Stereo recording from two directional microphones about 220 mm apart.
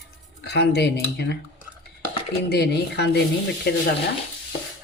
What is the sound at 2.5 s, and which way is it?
Speech, 45° left (ahead or behind).